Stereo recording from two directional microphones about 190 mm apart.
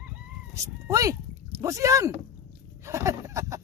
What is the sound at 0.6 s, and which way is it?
Speech, 20° right (ahead or behind).